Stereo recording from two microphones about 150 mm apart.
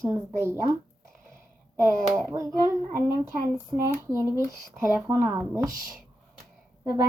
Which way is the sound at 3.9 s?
20° right (ahead or behind).